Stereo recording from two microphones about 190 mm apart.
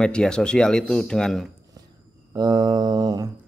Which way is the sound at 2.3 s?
20° right (ahead or behind).